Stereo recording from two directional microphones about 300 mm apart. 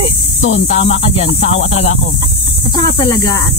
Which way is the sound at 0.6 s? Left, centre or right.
Left.